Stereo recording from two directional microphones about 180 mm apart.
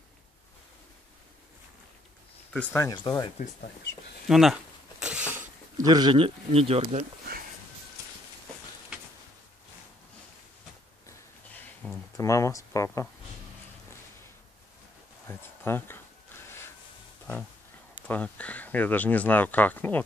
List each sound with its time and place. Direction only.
2.5 s speech: 10° left (ahead or behind)
3.3 s speech: 60° left (ahead or behind)
4.3 s speech: centre (ahead or behind)
5.3 s a sound: 10° right (ahead or behind)
5.9 s speech: 25° right (ahead or behind)
11.8 s a sound: 10° left (ahead or behind)
12.2 s speech: 15° left (ahead or behind)
15.2 s speech: 10° left (ahead or behind)
18.0 s speech: 10° left (ahead or behind)